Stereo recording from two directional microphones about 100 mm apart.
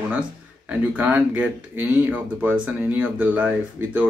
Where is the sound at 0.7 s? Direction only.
15° right (ahead or behind).